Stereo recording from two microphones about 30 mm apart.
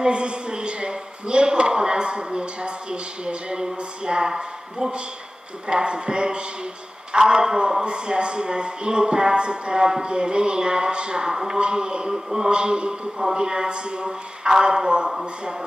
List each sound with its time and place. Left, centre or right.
0.0 s a man's voice: right
11.3 s a man's voice: centre
11.6 s a man's voice: right